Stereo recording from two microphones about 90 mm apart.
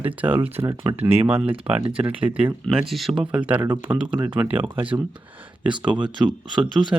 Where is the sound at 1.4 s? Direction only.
90° right.